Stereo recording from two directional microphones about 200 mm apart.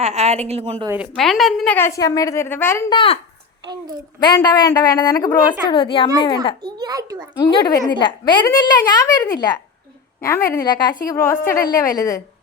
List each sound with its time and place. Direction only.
0.0 s a woman's voice: 35° right (ahead or behind)
1.1 s a woman's voice: centre (ahead or behind)
2.9 s a woman's voice: 25° left (ahead or behind)
4.2 s a woman's voice: 20° left (ahead or behind)
6.6 s a child's voice: 20° right (ahead or behind)
7.3 s a woman's voice: 20° left (ahead or behind)